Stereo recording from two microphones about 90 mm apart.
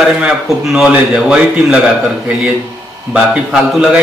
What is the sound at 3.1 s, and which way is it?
Speech, 10° right (ahead or behind).